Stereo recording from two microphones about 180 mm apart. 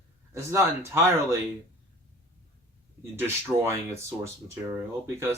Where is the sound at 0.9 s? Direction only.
15° right (ahead or behind).